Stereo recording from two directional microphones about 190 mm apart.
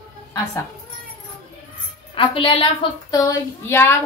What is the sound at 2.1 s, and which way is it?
A woman's voice, 30° left (ahead or behind).